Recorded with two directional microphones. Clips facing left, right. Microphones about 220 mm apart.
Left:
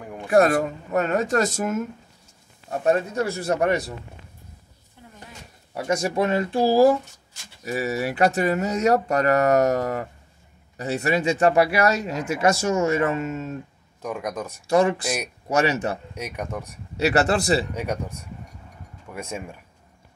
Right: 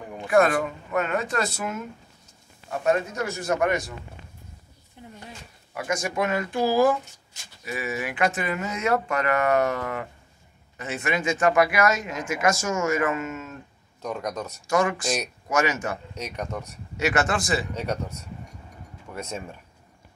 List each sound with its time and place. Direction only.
0.3 s speech: 40° left (ahead or behind)
2.7 s speech: 35° left (ahead or behind)
5.0 s a sound: 20° right (ahead or behind)
5.8 s speech: 35° left (ahead or behind)
14.0 s speech: 10° left (ahead or behind)
14.7 s speech: 35° left (ahead or behind)
16.2 s speech: 10° left (ahead or behind)
16.9 s speech: 35° left (ahead or behind)
17.7 s speech: 10° left (ahead or behind)